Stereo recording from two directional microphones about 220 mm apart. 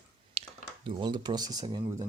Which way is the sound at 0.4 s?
30° right (ahead or behind).